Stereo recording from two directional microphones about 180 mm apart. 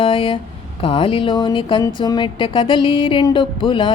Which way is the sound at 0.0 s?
30° left (ahead or behind).